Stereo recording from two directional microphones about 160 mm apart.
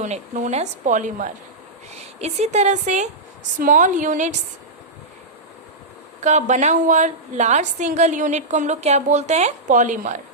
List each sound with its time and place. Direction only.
0.0 s a woman's voice: 50° right (ahead or behind)
6.2 s a woman's voice: 45° right (ahead or behind)